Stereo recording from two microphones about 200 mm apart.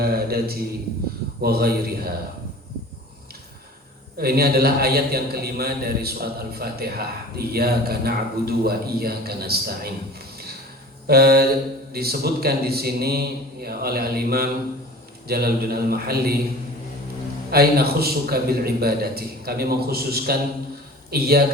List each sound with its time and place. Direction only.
0.0 s a man's voice: 50° right (ahead or behind)
4.2 s a man's voice: 50° right (ahead or behind)
11.0 s mantra: 50° right (ahead or behind)
11.9 s a man's voice: 50° right (ahead or behind)
17.5 s a man's voice: 50° right (ahead or behind)